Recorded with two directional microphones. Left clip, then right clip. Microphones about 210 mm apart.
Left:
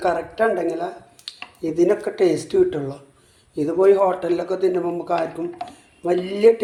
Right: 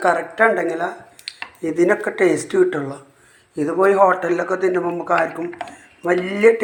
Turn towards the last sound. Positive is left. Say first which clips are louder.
# right 1 dB
turn(degrees=0)  # may be behind; listen again after turning